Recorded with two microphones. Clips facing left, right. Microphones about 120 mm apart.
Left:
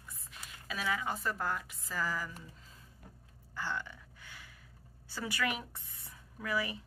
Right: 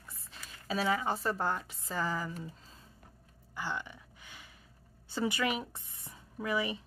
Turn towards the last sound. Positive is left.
turn(degrees=-20)  # may be behind; listen again after turning